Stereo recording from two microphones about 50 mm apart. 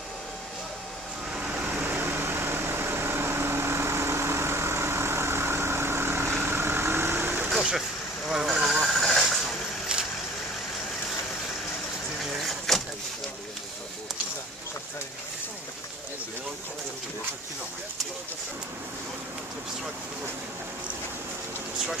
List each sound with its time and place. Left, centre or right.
1.3 s vehicle: right
1.6 s vehicle: right
8.5 s vehicle: centre
9.9 s vehicle: centre
12.2 s vehicle: centre